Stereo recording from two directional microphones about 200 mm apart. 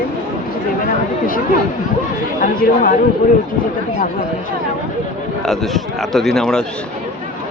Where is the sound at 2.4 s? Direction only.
45° left (ahead or behind).